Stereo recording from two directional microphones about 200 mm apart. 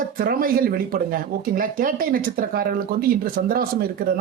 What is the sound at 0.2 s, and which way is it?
Speech, 45° right (ahead or behind).